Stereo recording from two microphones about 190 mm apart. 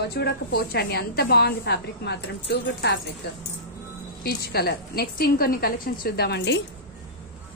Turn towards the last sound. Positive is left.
turn(degrees=65)  # may be behind; listen again after turning